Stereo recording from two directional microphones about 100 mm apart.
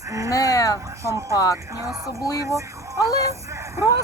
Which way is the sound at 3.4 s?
30° right (ahead or behind).